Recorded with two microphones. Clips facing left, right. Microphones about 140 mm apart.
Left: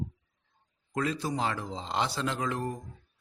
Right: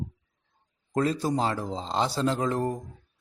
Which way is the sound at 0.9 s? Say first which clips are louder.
Right 5 dB; 35° right (ahead or behind).